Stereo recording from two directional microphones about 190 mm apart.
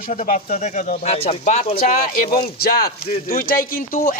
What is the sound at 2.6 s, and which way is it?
Speech, 55° left (ahead or behind).